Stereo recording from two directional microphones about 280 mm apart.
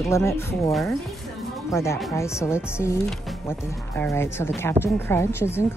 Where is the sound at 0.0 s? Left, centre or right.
Centre.